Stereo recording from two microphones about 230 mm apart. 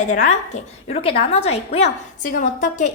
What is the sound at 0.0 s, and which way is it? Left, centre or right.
A woman's voice, left.